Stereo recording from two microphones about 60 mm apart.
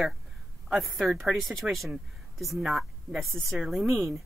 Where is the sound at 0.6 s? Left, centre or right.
Centre.